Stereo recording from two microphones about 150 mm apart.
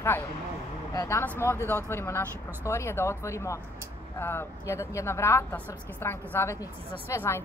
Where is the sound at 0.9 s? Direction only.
20° left (ahead or behind).